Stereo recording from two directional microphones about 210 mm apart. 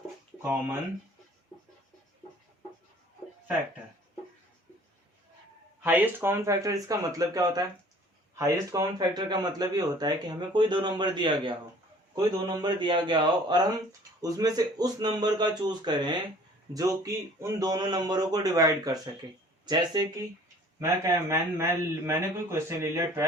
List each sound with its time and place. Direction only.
0.4 s a man's voice: 10° right (ahead or behind)
5.8 s a man's voice: 10° right (ahead or behind)